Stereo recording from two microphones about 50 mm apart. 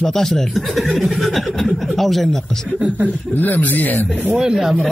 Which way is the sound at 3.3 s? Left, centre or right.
Left.